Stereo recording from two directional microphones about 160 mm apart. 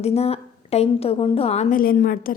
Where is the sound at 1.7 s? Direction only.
60° left (ahead or behind).